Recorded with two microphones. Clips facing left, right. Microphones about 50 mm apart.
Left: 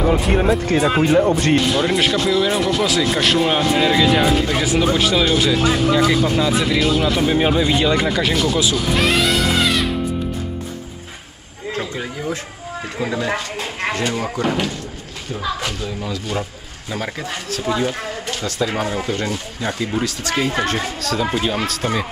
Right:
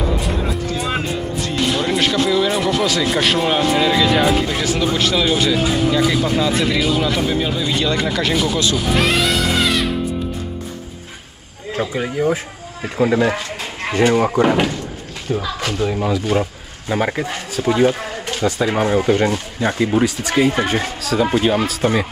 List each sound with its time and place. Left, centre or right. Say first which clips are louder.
0.3 s speech: left 6 dB; left
1.1 s speech: left 9 dB; left
1.7 s speech: left 1 dB; centre
4.6 s speech: left 1 dB; centre
7.2 s speech: left 3 dB; left; by 8.4 s centre
8.7 s music: even; centre
11.7 s speech: right 5 dB; centre
15.8 s speech: right 7 dB; right
16.1 s speech: right 6 dB; centre
17.3 s speech: right 2 dB; centre
17.6 s speech: right 6 dB; right